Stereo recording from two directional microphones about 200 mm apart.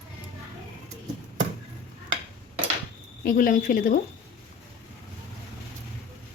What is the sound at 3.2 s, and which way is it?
Speech, 40° left (ahead or behind).